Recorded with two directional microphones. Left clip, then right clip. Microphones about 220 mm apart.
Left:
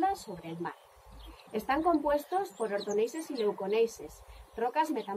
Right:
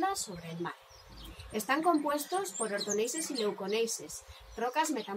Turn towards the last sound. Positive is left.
turn(degrees=-20)  # may be behind; listen again after turning